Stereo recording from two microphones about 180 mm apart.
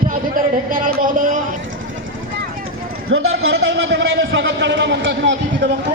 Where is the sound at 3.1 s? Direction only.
90° right.